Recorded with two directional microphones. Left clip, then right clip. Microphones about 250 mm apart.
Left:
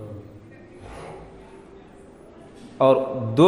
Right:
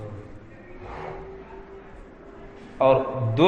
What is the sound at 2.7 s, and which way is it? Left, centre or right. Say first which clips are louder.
Speech: left 1 dB; left.